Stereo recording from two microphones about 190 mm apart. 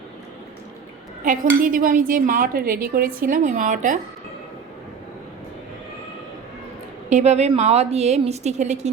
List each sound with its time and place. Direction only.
1.2 s speech: 45° right (ahead or behind)
7.1 s a woman's voice: 35° right (ahead or behind)